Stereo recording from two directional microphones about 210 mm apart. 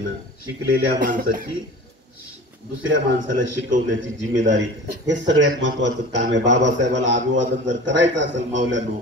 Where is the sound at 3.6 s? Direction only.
60° right (ahead or behind).